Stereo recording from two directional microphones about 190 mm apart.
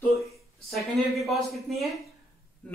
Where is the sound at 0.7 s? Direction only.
Centre (ahead or behind).